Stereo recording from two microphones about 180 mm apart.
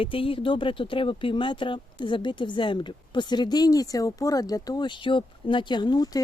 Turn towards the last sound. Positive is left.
turn(degrees=20)  # may be behind; listen again after turning